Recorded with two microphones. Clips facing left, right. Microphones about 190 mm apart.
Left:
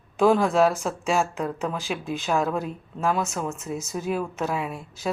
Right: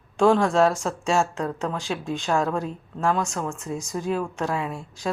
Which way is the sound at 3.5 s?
20° left (ahead or behind).